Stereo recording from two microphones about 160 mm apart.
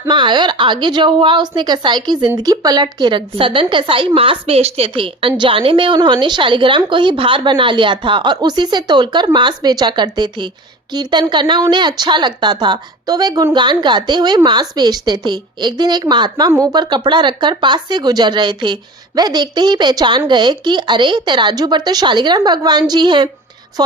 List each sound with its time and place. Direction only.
0.1 s a woman's voice: 30° right (ahead or behind)